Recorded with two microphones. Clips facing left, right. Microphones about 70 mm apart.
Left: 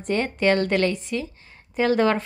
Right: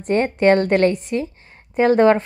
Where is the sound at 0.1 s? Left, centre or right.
Right.